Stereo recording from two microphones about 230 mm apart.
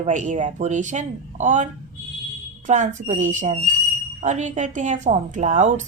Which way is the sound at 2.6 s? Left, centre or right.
Right.